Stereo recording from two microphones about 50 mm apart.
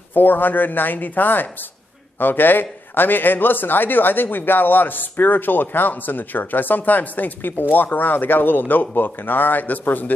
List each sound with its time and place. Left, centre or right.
0.1 s a man's voice: left